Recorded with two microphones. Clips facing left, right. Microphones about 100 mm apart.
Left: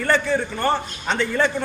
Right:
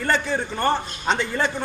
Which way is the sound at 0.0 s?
20° right (ahead or behind).